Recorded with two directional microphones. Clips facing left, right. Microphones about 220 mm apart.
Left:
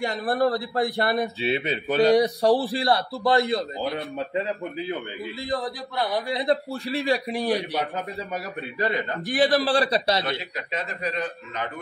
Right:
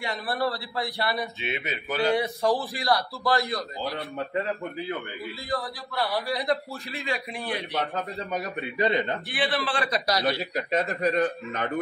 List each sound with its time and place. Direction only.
0.0 s a man's voice: 45° left (ahead or behind)
1.4 s a man's voice: 30° left (ahead or behind)
9.3 s a man's voice: 45° left (ahead or behind); by 10.4 s 25° left (ahead or behind)
10.5 s speech: 45° right (ahead or behind)